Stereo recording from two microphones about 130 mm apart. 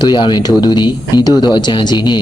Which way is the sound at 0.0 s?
35° left (ahead or behind).